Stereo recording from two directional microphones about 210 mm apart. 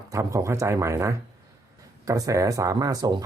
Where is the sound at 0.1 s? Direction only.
15° right (ahead or behind).